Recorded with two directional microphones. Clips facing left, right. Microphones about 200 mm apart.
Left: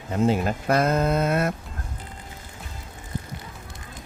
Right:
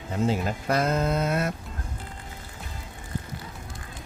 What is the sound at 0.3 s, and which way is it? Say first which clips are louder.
Speech: left 4 dB; 55° left (ahead or behind).